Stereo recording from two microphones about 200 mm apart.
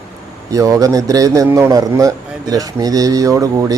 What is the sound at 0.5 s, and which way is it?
A man's voice, 15° right (ahead or behind).